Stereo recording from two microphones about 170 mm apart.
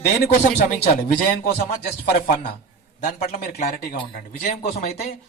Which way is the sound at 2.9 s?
55° left (ahead or behind).